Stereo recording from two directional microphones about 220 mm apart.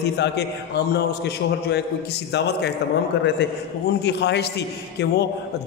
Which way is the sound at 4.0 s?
50° left (ahead or behind).